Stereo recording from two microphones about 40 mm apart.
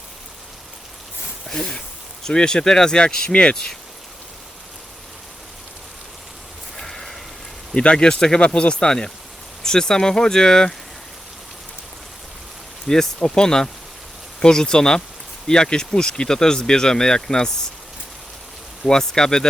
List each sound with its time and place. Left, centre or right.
1.5 s speech: centre
6.7 s a sound: centre
7.8 s speech: left
12.9 s speech: centre
18.9 s speech: centre